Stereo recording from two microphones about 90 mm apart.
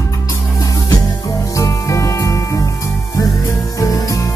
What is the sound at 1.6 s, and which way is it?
Music, 35° left (ahead or behind).